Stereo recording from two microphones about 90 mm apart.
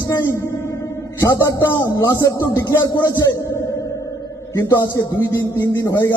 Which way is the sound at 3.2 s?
30° left (ahead or behind).